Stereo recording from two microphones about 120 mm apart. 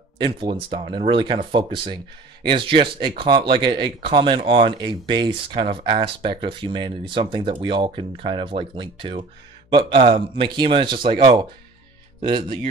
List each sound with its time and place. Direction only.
0.2 s speech: 45° right (ahead or behind)